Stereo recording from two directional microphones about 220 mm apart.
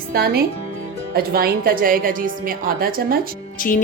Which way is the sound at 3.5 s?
40° left (ahead or behind).